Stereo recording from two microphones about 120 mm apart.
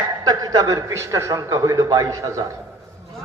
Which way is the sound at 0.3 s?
30° right (ahead or behind).